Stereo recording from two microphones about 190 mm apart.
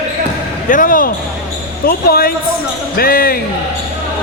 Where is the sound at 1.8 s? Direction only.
50° left (ahead or behind).